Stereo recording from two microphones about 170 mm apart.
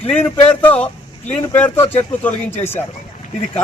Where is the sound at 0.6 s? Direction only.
10° left (ahead or behind).